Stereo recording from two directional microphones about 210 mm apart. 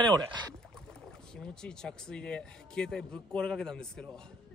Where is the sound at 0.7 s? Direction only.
Centre (ahead or behind).